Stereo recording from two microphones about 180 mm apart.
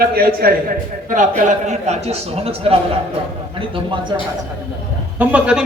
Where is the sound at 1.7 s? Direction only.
35° right (ahead or behind).